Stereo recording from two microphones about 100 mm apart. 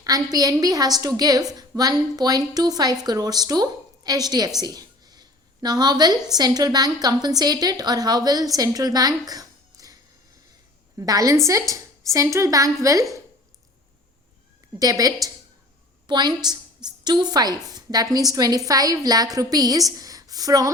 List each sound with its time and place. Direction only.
0.0 s a woman's voice: 40° right (ahead or behind)
4.6 s a sound: 40° right (ahead or behind)
6.3 s a woman's voice: 40° right (ahead or behind)
14.8 s a woman's voice: 35° right (ahead or behind)
16.0 s a woman's voice: 50° right (ahead or behind)